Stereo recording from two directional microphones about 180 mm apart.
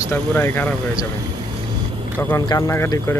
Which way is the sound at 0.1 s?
15° left (ahead or behind).